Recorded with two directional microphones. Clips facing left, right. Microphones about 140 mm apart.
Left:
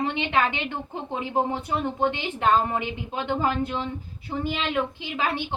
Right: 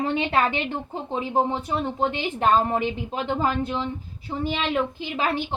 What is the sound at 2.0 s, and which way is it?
A woman's voice, 35° right (ahead or behind).